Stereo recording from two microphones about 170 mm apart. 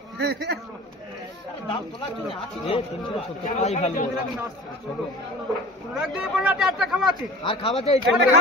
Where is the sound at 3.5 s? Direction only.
40° left (ahead or behind).